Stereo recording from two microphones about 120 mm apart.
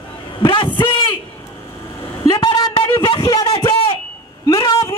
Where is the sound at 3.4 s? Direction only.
45° left (ahead or behind).